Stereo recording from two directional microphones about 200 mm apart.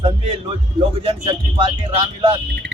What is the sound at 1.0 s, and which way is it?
Speech, 25° right (ahead or behind).